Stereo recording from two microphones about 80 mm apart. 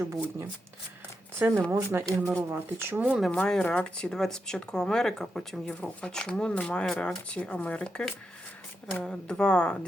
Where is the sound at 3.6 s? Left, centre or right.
Centre.